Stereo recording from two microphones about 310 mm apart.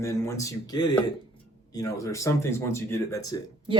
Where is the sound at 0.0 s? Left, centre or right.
Centre.